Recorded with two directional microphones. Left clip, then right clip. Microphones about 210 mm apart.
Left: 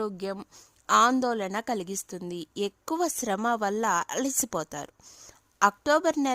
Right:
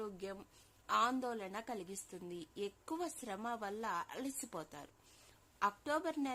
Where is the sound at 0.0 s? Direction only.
55° left (ahead or behind).